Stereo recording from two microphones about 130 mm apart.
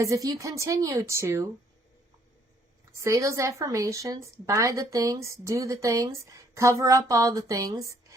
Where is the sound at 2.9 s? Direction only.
25° right (ahead or behind).